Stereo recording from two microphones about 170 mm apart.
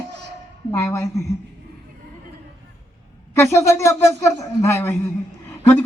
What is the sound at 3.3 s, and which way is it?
Speech, 15° left (ahead or behind).